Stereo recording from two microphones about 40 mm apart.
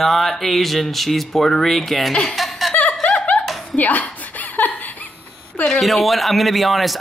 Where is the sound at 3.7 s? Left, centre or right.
Left.